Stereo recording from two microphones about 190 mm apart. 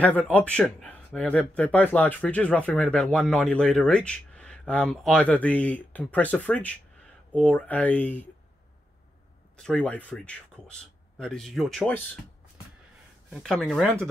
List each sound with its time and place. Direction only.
0.0 s speech: 5° left (ahead or behind)
9.6 s a man's voice: 5° left (ahead or behind)
13.3 s a man's voice: centre (ahead or behind)